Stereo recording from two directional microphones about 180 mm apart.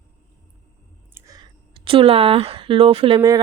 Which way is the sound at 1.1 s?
20° right (ahead or behind).